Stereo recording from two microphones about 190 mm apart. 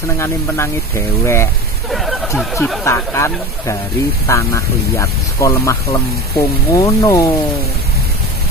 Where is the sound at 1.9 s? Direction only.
Centre (ahead or behind).